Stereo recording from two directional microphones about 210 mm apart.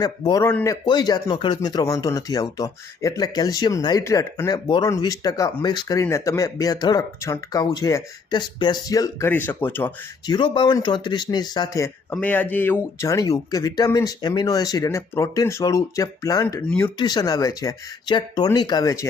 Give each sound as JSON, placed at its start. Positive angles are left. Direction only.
{"t": 0.0, "sound": "speech", "side_deg": 15}
{"t": 10.3, "sound": "speech", "side_deg": 20}
{"t": 12.1, "sound": "speech", "side_deg": 5}
{"t": 17.0, "sound": "speech", "side_deg": 20}